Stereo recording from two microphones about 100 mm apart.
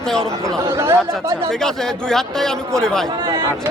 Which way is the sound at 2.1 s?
5° left (ahead or behind).